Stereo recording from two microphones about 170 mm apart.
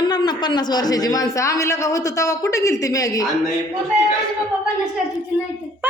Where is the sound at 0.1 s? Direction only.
25° left (ahead or behind).